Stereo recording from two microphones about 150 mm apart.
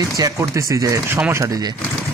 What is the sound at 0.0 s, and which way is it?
Speech, 20° right (ahead or behind).